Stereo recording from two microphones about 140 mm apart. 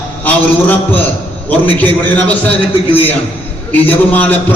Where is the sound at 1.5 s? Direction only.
10° left (ahead or behind).